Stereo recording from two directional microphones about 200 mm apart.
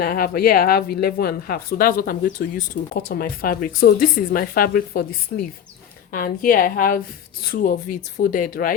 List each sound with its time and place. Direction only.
0.0 s speech: 50° left (ahead or behind)